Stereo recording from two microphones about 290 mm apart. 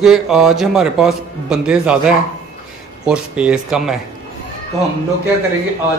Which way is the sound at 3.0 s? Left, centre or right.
Centre.